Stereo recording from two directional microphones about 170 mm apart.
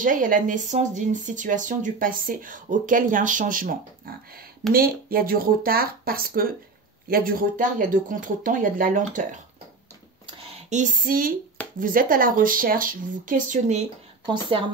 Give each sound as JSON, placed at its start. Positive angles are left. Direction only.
{"t": 0.0, "sound": "speech", "side_deg": -50}
{"t": 10.2, "sound": "a sound", "side_deg": -30}
{"t": 10.7, "sound": "speech", "side_deg": -50}
{"t": 14.2, "sound": "speech", "side_deg": -25}